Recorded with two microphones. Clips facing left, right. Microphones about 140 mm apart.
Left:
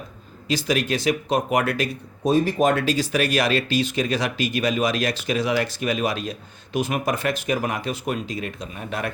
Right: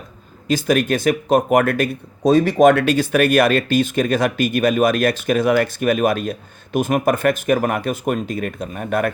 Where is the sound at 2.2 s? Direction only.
75° right (ahead or behind).